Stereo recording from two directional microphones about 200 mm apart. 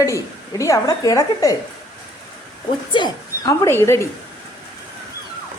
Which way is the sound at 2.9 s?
20° left (ahead or behind).